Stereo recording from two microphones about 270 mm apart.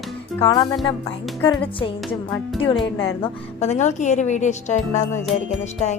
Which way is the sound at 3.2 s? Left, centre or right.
Left.